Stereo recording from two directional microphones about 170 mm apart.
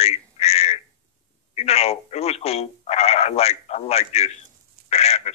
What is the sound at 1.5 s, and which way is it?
Speech, 40° left (ahead or behind).